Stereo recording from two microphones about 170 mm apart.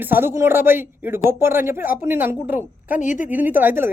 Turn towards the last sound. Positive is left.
turn(degrees=-10)  # may be behind; listen again after turning